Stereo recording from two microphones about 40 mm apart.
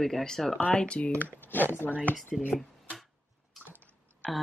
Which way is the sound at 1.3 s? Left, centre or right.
Left.